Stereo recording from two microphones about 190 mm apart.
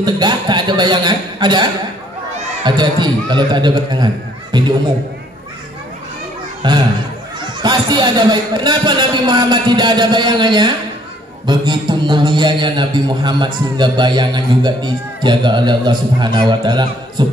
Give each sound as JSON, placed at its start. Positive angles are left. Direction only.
{"t": 0.0, "sound": "a man's voice", "side_deg": -25}
{"t": 6.6, "sound": "a man's voice", "side_deg": -25}